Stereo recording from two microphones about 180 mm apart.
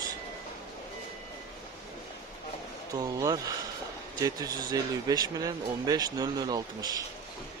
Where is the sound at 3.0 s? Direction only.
20° right (ahead or behind).